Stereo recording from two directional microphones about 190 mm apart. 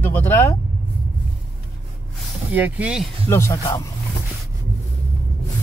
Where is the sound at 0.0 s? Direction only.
10° left (ahead or behind).